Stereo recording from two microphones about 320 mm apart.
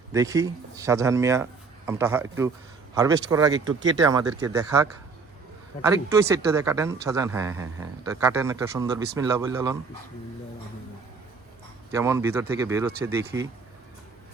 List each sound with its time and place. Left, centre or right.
0.1 s speech: centre
11.9 s speech: centre